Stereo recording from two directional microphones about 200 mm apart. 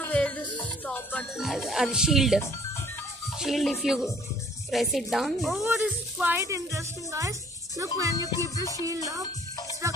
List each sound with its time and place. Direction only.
0.0 s music: 10° left (ahead or behind)
0.8 s speech: 5° left (ahead or behind); by 9.2 s 15° right (ahead or behind)